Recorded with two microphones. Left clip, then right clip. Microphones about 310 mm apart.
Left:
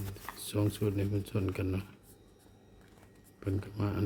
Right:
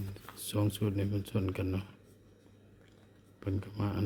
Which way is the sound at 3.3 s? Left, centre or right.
Centre.